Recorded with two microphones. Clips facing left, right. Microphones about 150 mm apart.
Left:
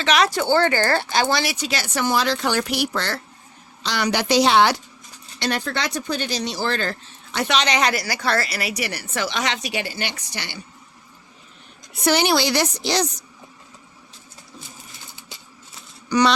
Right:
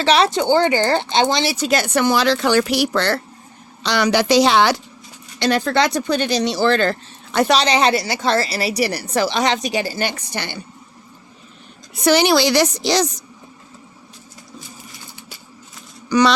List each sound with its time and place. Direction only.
0.0 s speech: 30° right (ahead or behind)
1.5 s speech: 45° right (ahead or behind); by 3.2 s 70° right (ahead or behind)
3.8 s a woman's voice: 85° right
7.3 s a woman's voice: 35° right (ahead or behind); by 10.6 s 55° right (ahead or behind)
12.0 s a woman's voice: 90° right
16.0 s speech: 90° right